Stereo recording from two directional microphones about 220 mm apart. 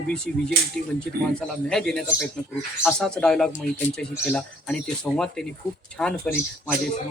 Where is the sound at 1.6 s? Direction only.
Centre (ahead or behind).